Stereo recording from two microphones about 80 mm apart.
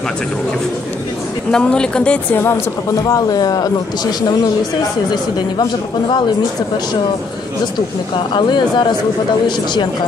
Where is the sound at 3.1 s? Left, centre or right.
Left.